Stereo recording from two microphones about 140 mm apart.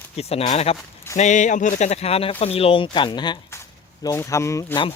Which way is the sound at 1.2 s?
60° left (ahead or behind).